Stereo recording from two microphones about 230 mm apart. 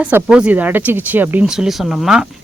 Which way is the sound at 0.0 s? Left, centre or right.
Centre.